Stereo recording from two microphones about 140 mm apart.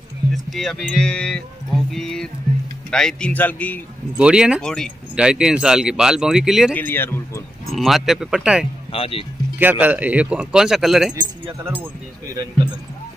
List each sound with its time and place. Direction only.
0.3 s speech: centre (ahead or behind)
4.2 s speech: 5° right (ahead or behind)
4.6 s speech: 5° left (ahead or behind)
5.1 s speech: 5° right (ahead or behind)
6.7 s speech: 15° left (ahead or behind)
7.7 s speech: centre (ahead or behind)
8.9 s speech: 45° left (ahead or behind)
9.6 s speech: 15° right (ahead or behind)